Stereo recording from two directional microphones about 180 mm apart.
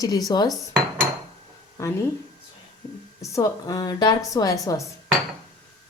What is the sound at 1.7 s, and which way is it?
Speech, 15° left (ahead or behind).